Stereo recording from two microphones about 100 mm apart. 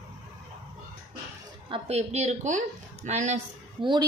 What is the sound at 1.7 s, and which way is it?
Speech, 90° right.